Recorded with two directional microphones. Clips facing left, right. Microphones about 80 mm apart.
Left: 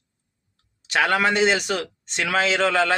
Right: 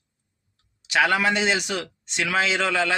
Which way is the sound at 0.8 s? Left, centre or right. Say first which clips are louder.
Even; left.